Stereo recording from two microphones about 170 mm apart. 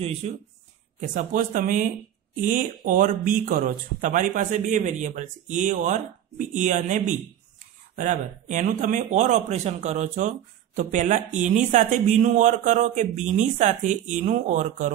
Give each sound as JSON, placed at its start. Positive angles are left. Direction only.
{"t": 1.0, "sound": "speech", "side_deg": -50}